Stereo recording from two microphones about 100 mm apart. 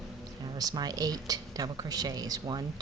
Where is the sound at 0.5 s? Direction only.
40° right (ahead or behind).